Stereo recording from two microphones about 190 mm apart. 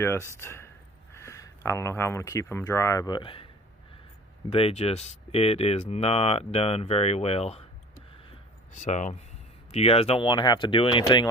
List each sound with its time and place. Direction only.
0.0 s speech: 15° left (ahead or behind)
4.5 s speech: 30° left (ahead or behind)
8.7 s speech: 40° left (ahead or behind)